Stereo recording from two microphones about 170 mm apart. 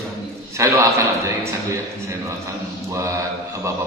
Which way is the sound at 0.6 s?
15° right (ahead or behind).